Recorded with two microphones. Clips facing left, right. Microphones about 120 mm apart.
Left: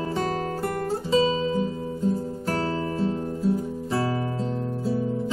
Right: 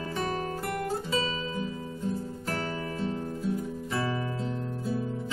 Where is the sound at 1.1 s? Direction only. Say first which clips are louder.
Left 9 dB; 30° left (ahead or behind).